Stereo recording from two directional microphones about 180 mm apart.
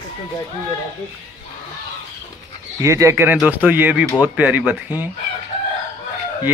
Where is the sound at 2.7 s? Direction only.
15° right (ahead or behind).